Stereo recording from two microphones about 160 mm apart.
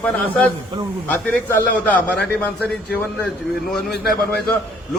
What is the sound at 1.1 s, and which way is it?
A man's voice, 10° left (ahead or behind).